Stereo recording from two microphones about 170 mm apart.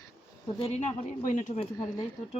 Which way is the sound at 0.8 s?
45° left (ahead or behind).